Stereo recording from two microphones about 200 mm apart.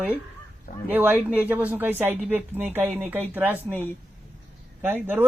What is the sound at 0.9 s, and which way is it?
Speech, 10° right (ahead or behind).